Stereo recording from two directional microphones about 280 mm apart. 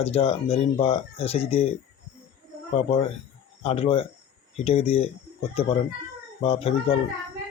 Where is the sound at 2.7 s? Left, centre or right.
Left.